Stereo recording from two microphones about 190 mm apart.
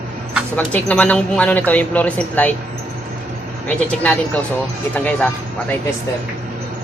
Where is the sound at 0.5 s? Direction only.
10° left (ahead or behind).